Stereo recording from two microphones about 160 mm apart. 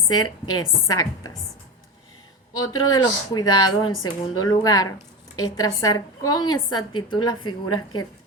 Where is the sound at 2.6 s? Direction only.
25° left (ahead or behind).